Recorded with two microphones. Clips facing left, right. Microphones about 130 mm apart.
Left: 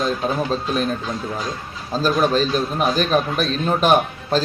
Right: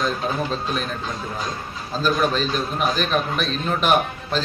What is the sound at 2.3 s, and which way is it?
A man's voice, 40° left (ahead or behind).